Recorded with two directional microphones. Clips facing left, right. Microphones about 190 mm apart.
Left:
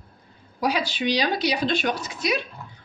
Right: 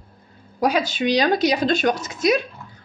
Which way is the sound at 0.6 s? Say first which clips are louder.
Right 4 dB; 45° right (ahead or behind).